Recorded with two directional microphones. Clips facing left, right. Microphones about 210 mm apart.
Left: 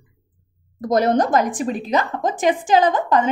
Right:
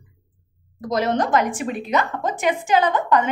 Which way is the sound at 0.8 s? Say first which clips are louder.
Left 4 dB; 45° left (ahead or behind).